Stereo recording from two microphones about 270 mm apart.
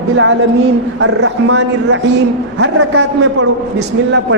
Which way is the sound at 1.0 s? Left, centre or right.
Right.